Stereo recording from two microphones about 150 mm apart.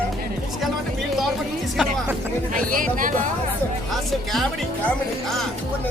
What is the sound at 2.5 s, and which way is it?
Speech, 65° right (ahead or behind).